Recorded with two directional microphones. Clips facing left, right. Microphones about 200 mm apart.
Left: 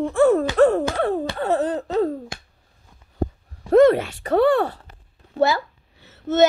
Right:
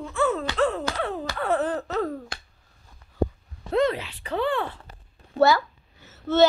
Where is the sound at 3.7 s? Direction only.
50° left (ahead or behind).